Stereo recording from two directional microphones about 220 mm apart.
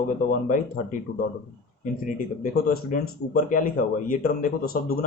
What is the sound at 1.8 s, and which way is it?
Speech, 40° left (ahead or behind).